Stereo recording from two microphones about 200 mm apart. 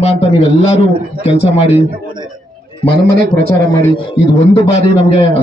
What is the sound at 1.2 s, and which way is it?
Speech, 30° left (ahead or behind).